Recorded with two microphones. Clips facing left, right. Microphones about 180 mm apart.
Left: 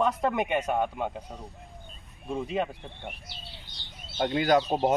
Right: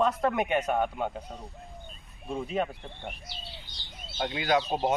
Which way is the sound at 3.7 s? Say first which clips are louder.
Left 4 dB; 55° left (ahead or behind).